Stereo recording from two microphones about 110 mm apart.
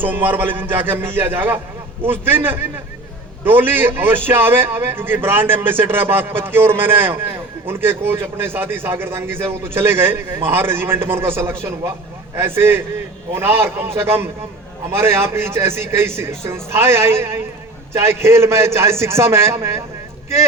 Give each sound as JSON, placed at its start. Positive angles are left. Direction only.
{"t": 0.0, "sound": "a man's voice", "side_deg": -15}